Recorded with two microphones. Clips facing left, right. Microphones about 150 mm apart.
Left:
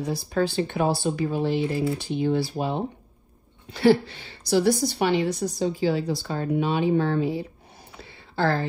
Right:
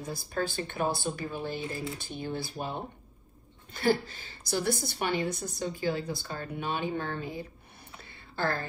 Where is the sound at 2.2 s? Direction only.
60° left (ahead or behind).